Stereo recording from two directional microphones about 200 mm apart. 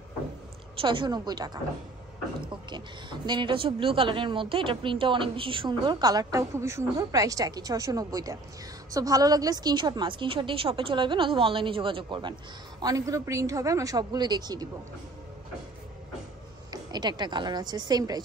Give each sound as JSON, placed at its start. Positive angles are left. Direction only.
{"t": 0.7, "sound": "a woman's voice", "side_deg": -25}
{"t": 16.7, "sound": "a woman's voice", "side_deg": -20}